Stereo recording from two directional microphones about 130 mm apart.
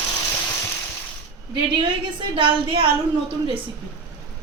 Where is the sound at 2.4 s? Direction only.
45° right (ahead or behind).